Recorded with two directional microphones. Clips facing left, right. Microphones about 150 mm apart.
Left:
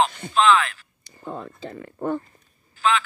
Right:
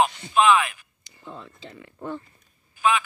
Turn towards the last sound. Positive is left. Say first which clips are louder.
# even
turn(degrees=-15)  # may be behind; listen again after turning